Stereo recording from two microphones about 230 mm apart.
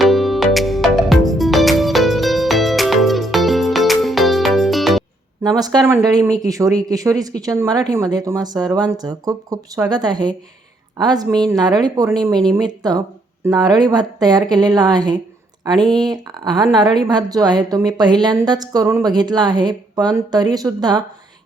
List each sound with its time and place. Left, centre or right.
0.0 s music: centre
5.4 s a woman's voice: centre